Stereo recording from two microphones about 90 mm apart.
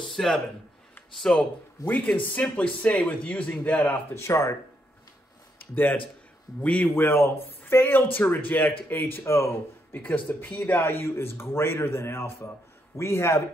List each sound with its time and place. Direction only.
0.1 s a sound: 5° left (ahead or behind)
1.1 s a man's voice: 10° left (ahead or behind)
1.9 s a man's voice: 20° left (ahead or behind)
4.1 s a man's voice: 30° left (ahead or behind)
5.6 s a man's voice: 20° left (ahead or behind)